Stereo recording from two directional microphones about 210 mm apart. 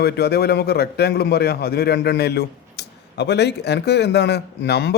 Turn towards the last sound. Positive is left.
turn(degrees=55)  # may be behind; listen again after turning